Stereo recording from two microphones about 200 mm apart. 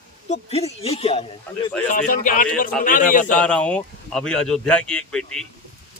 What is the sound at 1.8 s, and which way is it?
Speech, 40° left (ahead or behind).